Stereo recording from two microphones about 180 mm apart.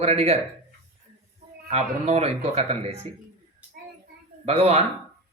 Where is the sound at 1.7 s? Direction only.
35° right (ahead or behind).